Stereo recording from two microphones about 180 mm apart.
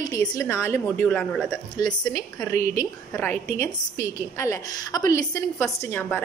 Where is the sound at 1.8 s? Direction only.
20° left (ahead or behind).